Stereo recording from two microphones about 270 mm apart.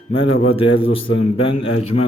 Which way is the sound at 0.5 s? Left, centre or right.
Centre.